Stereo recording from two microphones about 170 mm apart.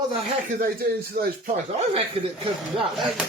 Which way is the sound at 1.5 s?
35° right (ahead or behind).